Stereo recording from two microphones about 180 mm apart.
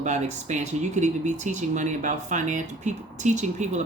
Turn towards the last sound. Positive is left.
turn(degrees=-40)  # may be behind; listen again after turning